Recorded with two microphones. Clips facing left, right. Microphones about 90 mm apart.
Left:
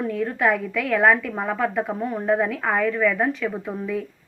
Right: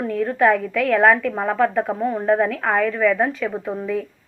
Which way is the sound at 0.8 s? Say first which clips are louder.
Right 3 dB; 5° left (ahead or behind).